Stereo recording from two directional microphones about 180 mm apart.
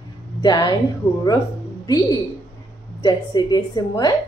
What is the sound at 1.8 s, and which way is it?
A woman's voice, 20° left (ahead or behind).